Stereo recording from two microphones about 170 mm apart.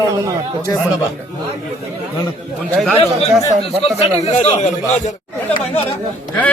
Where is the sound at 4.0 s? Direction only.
40° left (ahead or behind).